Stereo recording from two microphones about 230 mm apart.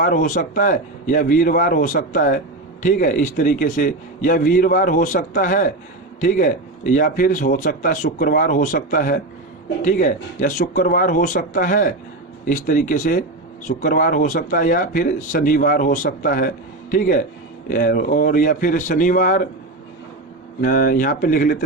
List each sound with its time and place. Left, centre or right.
0.0 s a man's voice: left
20.6 s a man's voice: left